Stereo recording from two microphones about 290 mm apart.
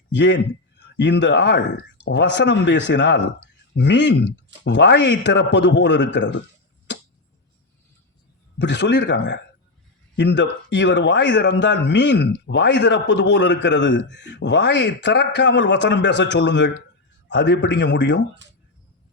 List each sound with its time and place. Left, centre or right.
0.1 s speech: left
8.5 s speech: left